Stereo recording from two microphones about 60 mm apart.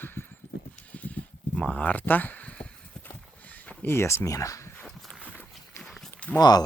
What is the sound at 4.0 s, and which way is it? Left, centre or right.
Speech, left.